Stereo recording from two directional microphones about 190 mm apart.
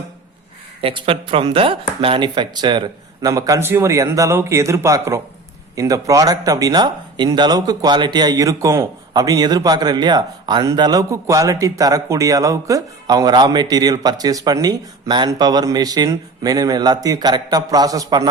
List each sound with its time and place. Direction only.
0.8 s speech: 30° right (ahead or behind)